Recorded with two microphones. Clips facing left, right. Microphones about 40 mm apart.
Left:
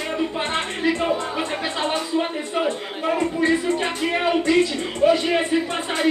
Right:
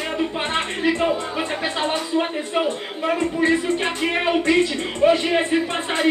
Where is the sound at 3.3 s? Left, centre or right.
Right.